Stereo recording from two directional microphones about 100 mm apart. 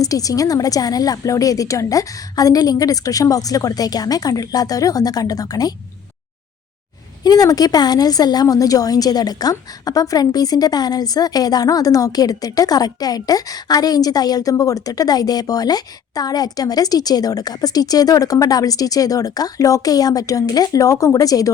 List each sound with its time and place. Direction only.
0.0 s a woman's voice: 35° left (ahead or behind)
7.3 s a woman's voice: 40° left (ahead or behind)